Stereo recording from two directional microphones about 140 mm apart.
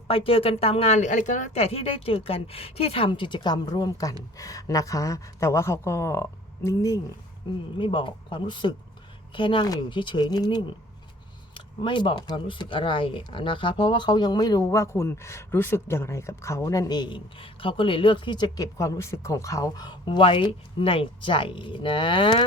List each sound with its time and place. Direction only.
0.1 s speech: 40° left (ahead or behind); by 1.5 s 65° left (ahead or behind)
1.5 s a woman's voice: 45° left (ahead or behind); by 7.0 s 20° left (ahead or behind)
7.8 s speech: 35° left (ahead or behind)